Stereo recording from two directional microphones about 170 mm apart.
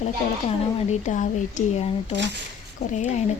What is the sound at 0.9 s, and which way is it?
Speech, 45° left (ahead or behind).